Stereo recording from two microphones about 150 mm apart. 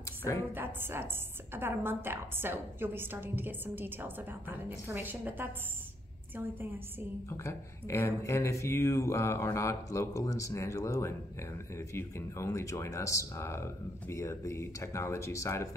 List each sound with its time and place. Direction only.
0.5 s a woman's voice: 15° right (ahead or behind)
7.2 s speech: 20° left (ahead or behind)